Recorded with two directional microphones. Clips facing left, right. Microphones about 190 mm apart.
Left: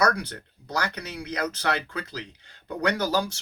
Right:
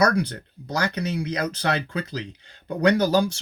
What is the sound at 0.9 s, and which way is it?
Speech, 25° right (ahead or behind).